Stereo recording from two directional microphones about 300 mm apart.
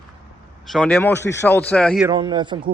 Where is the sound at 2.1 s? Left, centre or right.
Centre.